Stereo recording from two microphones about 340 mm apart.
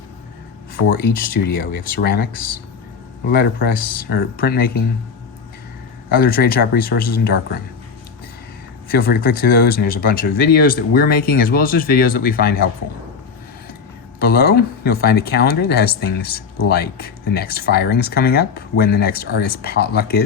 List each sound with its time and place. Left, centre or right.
0.9 s speech: left
6.1 s speech: left
8.9 s speech: left
14.2 s speech: left